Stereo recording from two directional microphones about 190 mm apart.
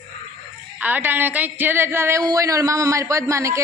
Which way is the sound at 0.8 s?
10° right (ahead or behind).